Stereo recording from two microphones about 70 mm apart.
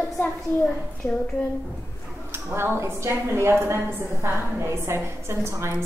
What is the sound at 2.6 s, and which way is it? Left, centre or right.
A woman's voice, right.